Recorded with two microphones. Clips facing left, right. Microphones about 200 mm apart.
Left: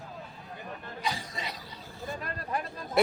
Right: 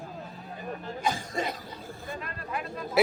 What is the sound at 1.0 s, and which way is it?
Speech, 50° right (ahead or behind).